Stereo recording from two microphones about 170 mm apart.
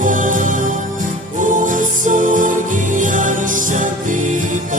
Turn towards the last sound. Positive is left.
turn(degrees=-50)  # may be behind; listen again after turning